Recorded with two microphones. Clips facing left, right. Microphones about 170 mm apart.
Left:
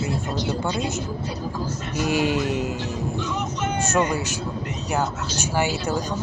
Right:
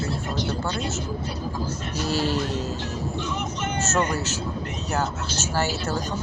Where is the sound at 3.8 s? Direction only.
10° left (ahead or behind).